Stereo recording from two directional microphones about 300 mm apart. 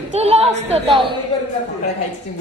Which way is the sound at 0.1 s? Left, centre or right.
Right.